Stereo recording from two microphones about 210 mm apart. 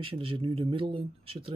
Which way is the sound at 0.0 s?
25° right (ahead or behind).